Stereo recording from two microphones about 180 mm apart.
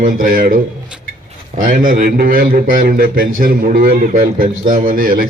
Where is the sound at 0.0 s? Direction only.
50° right (ahead or behind).